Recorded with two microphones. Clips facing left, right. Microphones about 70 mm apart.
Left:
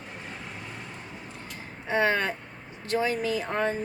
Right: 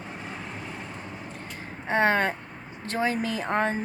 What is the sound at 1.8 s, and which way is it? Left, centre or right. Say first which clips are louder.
Speech: right 2 dB; right.